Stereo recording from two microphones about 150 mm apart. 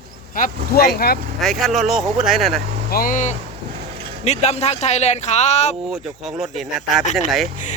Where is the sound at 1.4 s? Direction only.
Centre (ahead or behind).